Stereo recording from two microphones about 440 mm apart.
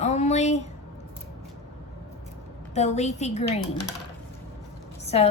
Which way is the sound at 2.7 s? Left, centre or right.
Centre.